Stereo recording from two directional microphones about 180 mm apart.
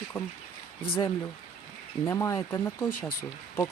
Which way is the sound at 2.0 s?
15° left (ahead or behind).